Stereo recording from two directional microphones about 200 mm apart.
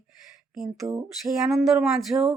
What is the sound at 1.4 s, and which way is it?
Speech, centre (ahead or behind).